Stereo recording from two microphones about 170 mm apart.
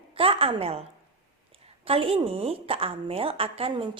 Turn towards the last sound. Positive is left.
turn(degrees=-30)  # may be behind; listen again after turning